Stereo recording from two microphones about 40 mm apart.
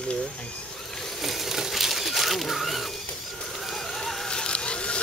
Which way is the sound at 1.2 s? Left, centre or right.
Centre.